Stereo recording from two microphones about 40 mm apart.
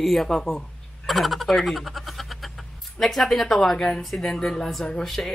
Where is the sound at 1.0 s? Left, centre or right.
Centre.